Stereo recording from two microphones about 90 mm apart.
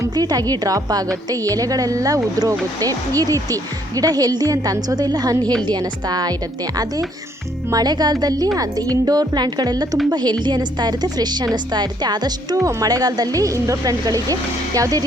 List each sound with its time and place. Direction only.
0.0 s a woman's voice: 45° right (ahead or behind)
7.7 s a woman's voice: 45° right (ahead or behind)